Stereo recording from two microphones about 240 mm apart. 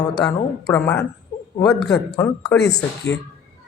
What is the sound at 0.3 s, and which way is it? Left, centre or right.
A woman's voice, centre.